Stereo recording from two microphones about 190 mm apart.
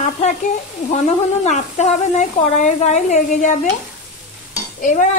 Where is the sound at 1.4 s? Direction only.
40° left (ahead or behind).